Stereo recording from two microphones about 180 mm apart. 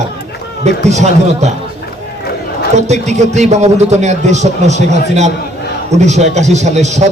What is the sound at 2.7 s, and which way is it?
A man's voice, 40° right (ahead or behind).